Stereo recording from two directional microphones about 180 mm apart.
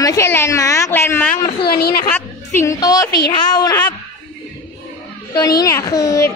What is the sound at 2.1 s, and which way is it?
A woman's voice, 15° left (ahead or behind).